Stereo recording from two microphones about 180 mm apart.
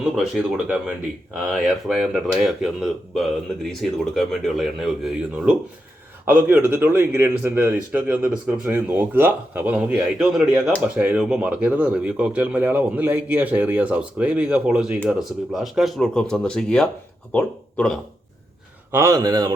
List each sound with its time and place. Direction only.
0.0 s speech: 5° right (ahead or behind)
6.2 s speech: 10° right (ahead or behind)
18.9 s a man's voice: 15° right (ahead or behind)